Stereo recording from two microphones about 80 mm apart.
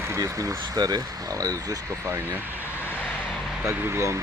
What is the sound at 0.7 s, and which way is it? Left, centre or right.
Speech, right.